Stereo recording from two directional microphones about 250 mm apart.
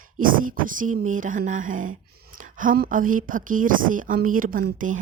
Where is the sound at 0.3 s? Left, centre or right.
Right.